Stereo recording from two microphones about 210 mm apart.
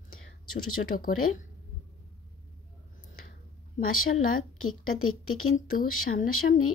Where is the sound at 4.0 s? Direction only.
80° left.